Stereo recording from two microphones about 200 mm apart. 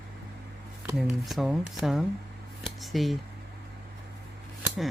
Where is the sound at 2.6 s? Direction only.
Centre (ahead or behind).